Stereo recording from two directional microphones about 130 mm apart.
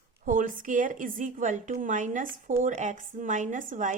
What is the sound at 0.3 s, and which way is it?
A woman's voice, 90° right.